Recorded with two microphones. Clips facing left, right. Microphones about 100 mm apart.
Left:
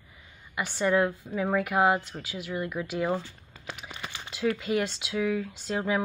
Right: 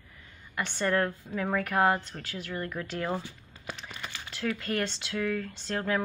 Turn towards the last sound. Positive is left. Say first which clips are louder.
# left 2 dB
turn(degrees=10)  # may be behind; listen again after turning